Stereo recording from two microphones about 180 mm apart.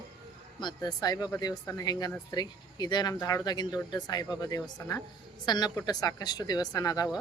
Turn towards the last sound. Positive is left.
turn(degrees=20)  # may be behind; listen again after turning